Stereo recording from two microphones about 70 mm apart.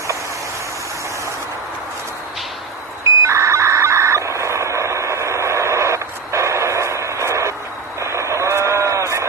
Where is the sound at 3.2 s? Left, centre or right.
Right.